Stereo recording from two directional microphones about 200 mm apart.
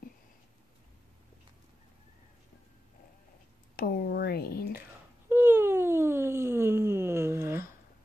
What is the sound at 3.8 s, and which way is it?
Speech, 50° left (ahead or behind).